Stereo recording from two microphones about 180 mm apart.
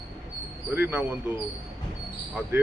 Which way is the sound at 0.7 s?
10° right (ahead or behind).